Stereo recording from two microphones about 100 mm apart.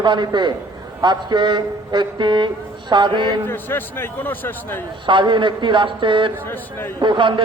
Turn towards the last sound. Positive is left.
turn(degrees=-55)  # may be behind; listen again after turning